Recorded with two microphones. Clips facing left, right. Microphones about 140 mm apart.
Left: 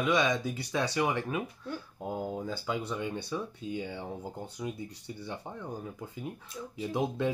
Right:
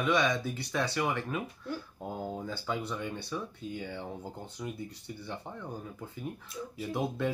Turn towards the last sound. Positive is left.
turn(degrees=20)  # may be behind; listen again after turning